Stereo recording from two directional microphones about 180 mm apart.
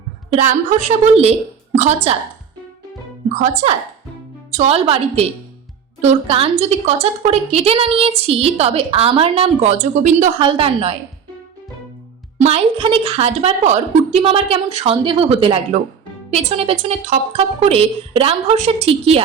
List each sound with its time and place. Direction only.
0.3 s a woman's voice: 40° right (ahead or behind)
3.6 s a woman's voice: 35° right (ahead or behind)
10.4 s a woman's voice: 30° right (ahead or behind)
12.4 s a woman's voice: 35° right (ahead or behind)